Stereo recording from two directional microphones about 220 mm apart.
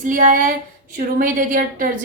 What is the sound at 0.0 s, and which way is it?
A woman's voice, 35° right (ahead or behind).